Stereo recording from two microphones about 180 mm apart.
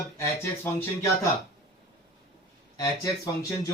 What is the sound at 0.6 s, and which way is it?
Speech, 15° left (ahead or behind).